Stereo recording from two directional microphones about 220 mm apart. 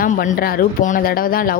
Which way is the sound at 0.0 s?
40° left (ahead or behind).